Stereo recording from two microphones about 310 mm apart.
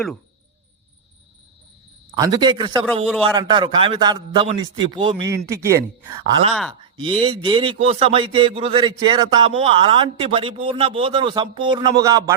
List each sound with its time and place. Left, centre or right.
2.1 s a man's voice: centre
6.5 s speech: centre
7.2 s a man's voice: centre